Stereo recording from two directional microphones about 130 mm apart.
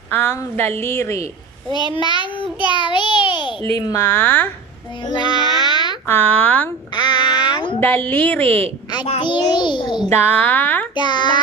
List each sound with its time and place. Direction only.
0.1 s a woman's voice: 15° left (ahead or behind)
1.7 s child singing: 35° left (ahead or behind)
3.7 s speech: 30° left (ahead or behind)
4.0 s a woman's voice: 15° left (ahead or behind)
5.0 s babbling: 35° left (ahead or behind)
6.0 s a woman's voice: 15° left (ahead or behind)
6.9 s a sound: 35° left (ahead or behind)
7.8 s a woman's voice: 15° left (ahead or behind)
9.2 s child singing: 35° left (ahead or behind)
10.0 s a woman's voice: 15° left (ahead or behind)
11.0 s child singing: 35° left (ahead or behind)